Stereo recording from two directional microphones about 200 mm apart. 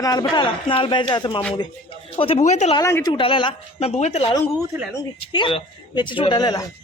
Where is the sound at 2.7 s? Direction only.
20° left (ahead or behind).